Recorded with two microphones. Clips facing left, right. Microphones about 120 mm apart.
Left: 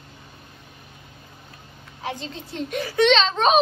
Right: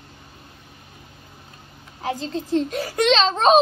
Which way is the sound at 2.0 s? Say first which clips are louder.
Right 5 dB; 40° right (ahead or behind).